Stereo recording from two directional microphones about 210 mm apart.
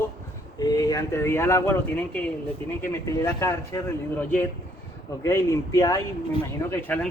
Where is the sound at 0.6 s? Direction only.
15° left (ahead or behind).